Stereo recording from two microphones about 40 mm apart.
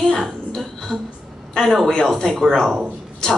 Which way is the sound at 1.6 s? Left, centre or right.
Centre.